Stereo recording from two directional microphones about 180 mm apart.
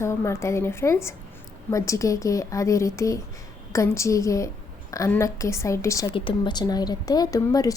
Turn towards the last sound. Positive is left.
turn(degrees=20)  # may be behind; listen again after turning